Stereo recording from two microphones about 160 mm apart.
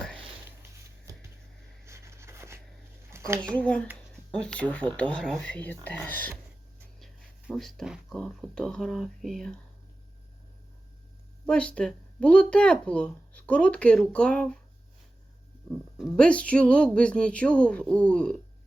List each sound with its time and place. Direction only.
1.8 s a sound: 15° right (ahead or behind)
3.4 s speech: 10° left (ahead or behind)
11.4 s speech: 5° left (ahead or behind)
15.7 s speech: centre (ahead or behind)